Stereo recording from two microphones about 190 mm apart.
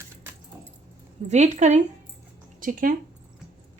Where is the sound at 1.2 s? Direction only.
40° right (ahead or behind).